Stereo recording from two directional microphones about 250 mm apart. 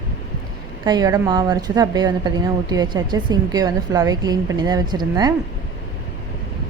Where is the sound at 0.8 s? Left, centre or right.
Centre.